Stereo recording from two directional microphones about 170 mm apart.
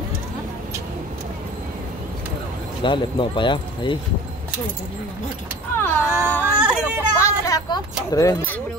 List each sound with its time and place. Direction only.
2.8 s speech: 30° left (ahead or behind)
5.8 s speech: 10° left (ahead or behind)
6.8 s vehicle: 15° left (ahead or behind)
8.1 s speech: 20° left (ahead or behind)